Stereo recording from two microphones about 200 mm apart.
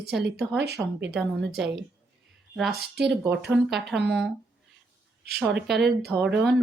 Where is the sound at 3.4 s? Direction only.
5° right (ahead or behind).